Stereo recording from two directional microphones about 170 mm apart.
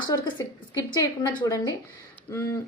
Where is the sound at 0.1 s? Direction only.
25° left (ahead or behind).